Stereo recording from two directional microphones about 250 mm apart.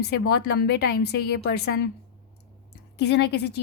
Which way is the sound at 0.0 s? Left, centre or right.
Left.